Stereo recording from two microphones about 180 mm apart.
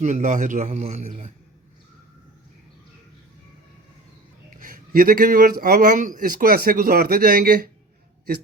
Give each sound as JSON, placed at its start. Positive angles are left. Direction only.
{"t": 0.0, "sound": "speech", "side_deg": -45}
{"t": 4.6, "sound": "speech", "side_deg": -50}